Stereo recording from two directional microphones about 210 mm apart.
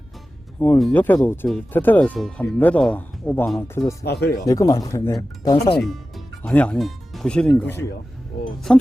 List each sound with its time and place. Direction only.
0.6 s speech: 5° left (ahead or behind)
4.0 s speech: 50° left (ahead or behind)
4.4 s speech: 15° left (ahead or behind)
5.8 s speech: centre (ahead or behind)
8.7 s speech: centre (ahead or behind)